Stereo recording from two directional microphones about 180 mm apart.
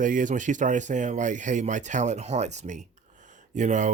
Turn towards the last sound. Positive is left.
turn(degrees=-45)  # may be behind; listen again after turning